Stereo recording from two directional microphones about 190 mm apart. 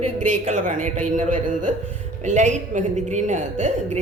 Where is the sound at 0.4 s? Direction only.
40° right (ahead or behind).